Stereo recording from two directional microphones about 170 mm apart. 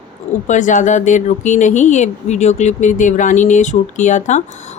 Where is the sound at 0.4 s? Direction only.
45° left (ahead or behind).